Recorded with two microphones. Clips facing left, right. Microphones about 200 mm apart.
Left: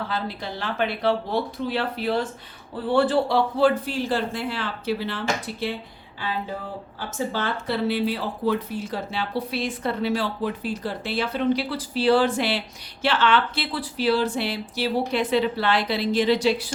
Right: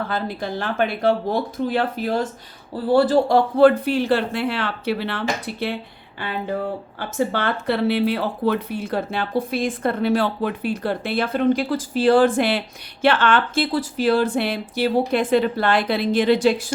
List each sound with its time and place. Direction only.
0.1 s speech: 50° right (ahead or behind)
7.0 s speech: 60° right (ahead or behind)